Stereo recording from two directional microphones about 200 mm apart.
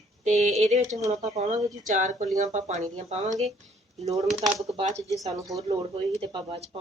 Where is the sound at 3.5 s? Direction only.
Centre (ahead or behind).